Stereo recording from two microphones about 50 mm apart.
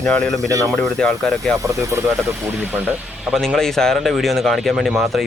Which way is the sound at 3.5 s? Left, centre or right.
Centre.